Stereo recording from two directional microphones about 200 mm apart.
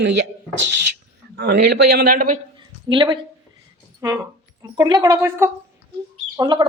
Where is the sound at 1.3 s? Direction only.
55° right (ahead or behind).